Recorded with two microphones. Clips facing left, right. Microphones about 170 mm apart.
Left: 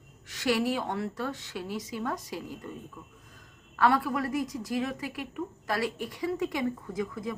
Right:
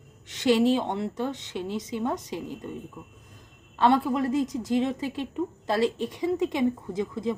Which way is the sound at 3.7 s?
25° right (ahead or behind).